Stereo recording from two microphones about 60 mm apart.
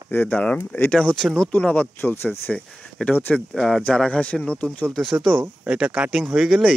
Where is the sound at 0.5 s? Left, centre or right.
Left.